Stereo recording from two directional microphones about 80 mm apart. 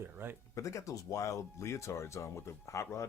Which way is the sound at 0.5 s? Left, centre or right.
Left.